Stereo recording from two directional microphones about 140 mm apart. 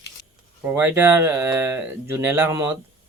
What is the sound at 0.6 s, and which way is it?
Speech, 15° right (ahead or behind).